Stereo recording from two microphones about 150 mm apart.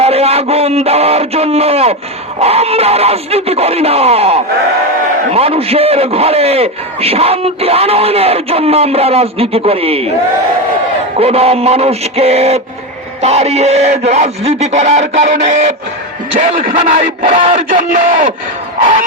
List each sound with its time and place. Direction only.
0.0 s a sound: 45° right (ahead or behind)
2.4 s a man's voice: 40° right (ahead or behind)
11.2 s speech: 45° right (ahead or behind)
16.6 s speech: 65° right (ahead or behind)